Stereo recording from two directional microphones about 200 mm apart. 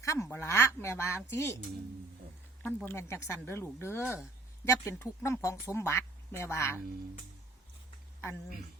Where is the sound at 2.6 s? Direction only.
10° left (ahead or behind).